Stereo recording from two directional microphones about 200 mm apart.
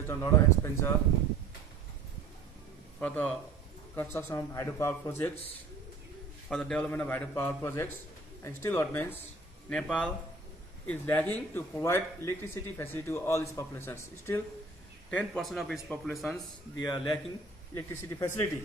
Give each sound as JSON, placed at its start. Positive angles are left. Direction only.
{"t": 0.1, "sound": "speech", "side_deg": 10}
{"t": 3.0, "sound": "speech", "side_deg": 5}
{"t": 6.5, "sound": "speech", "side_deg": 5}
{"t": 16.8, "sound": "speech", "side_deg": 20}